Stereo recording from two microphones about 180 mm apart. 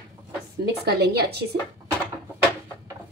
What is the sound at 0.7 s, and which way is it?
Speech, 60° right (ahead or behind).